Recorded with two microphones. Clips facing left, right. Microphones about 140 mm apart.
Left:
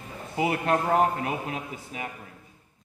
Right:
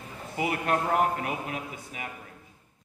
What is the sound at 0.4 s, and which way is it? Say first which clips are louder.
Speech: left 3 dB; 30° left (ahead or behind).